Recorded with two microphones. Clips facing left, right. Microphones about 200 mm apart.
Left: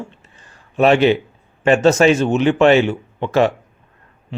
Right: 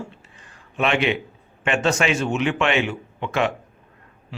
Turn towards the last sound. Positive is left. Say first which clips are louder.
# left 7 dB
turn(degrees=35)  # may be behind; listen again after turning